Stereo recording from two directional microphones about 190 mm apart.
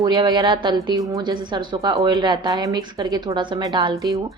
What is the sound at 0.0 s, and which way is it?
A woman's voice, 20° right (ahead or behind).